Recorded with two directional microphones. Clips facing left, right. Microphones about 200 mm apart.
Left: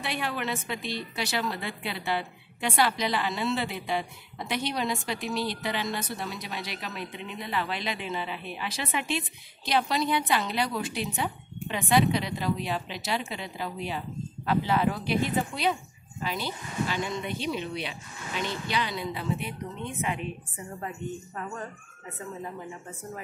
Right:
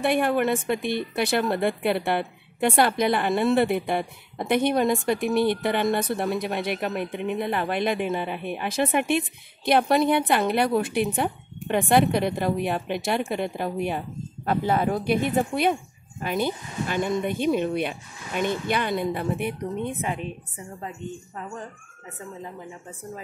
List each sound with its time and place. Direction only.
0.0 s a woman's voice: 50° right (ahead or behind)
22.4 s speech: 15° right (ahead or behind)